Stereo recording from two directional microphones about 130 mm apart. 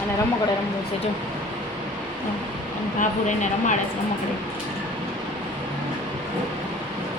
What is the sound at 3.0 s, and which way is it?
Speech, 70° left (ahead or behind).